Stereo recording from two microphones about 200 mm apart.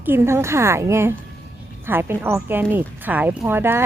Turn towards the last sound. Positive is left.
turn(degrees=-10)  # may be behind; listen again after turning